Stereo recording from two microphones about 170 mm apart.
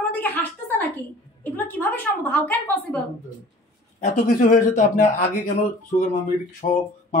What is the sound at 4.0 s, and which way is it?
A man's voice, 50° left (ahead or behind).